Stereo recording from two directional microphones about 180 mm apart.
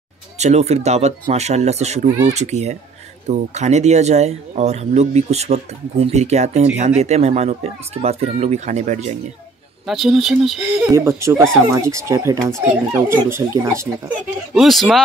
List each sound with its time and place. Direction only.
0.4 s speech: 35° right (ahead or behind)
9.8 s speech: centre (ahead or behind)
10.9 s speech: 15° right (ahead or behind)
14.5 s speech: centre (ahead or behind)